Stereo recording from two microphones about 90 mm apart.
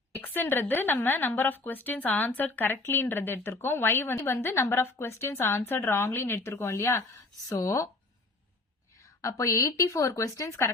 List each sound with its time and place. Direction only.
0.2 s speech: 25° left (ahead or behind)
9.2 s speech: 35° left (ahead or behind)